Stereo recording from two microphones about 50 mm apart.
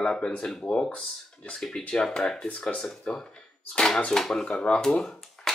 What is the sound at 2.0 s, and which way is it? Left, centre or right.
Speech, centre.